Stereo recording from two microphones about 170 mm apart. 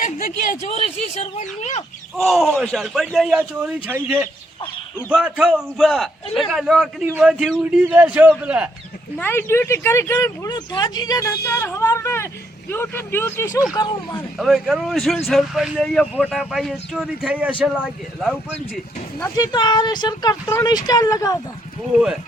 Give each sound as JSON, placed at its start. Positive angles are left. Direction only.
{"t": 0.0, "sound": "speech", "side_deg": 55}
{"t": 0.7, "sound": "speech", "side_deg": 35}
{"t": 2.1, "sound": "a man's voice", "side_deg": 0}
{"t": 4.6, "sound": "speech", "side_deg": 10}
{"t": 5.1, "sound": "a man's voice", "side_deg": -5}
{"t": 9.1, "sound": "speech", "side_deg": 10}
{"t": 13.7, "sound": "speech", "side_deg": 25}
{"t": 14.3, "sound": "speech", "side_deg": 0}
{"t": 19.4, "sound": "speech", "side_deg": 25}